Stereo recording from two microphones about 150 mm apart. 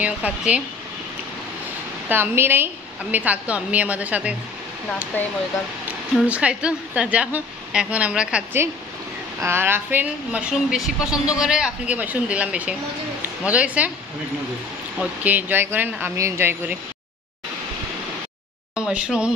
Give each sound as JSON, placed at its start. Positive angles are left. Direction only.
{"t": 0.0, "sound": "a woman's voice", "side_deg": -10}
{"t": 2.0, "sound": "a woman's voice", "side_deg": -15}
{"t": 5.1, "sound": "speech", "side_deg": 15}
{"t": 6.2, "sound": "a woman's voice", "side_deg": -10}
{"t": 15.0, "sound": "a woman's voice", "side_deg": -10}
{"t": 18.8, "sound": "speech", "side_deg": -5}